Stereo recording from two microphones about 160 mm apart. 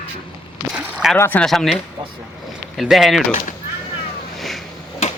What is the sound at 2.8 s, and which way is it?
Speech, centre (ahead or behind).